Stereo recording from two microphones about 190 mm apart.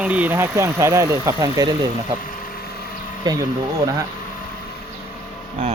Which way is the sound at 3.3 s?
20° right (ahead or behind).